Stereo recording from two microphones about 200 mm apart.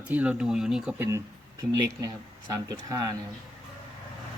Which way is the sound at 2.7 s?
20° right (ahead or behind).